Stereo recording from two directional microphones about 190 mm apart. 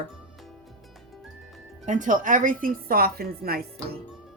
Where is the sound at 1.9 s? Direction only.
40° right (ahead or behind).